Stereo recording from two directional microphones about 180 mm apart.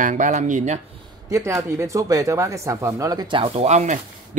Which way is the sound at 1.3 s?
15° right (ahead or behind).